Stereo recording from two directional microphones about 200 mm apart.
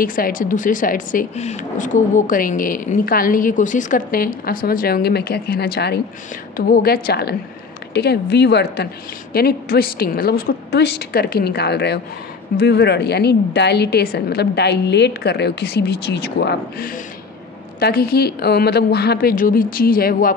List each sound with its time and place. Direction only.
0.0 s a woman's voice: 45° left (ahead or behind)